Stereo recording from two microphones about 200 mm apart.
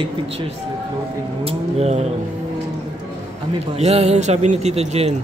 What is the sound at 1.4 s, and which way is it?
Speech, 30° right (ahead or behind).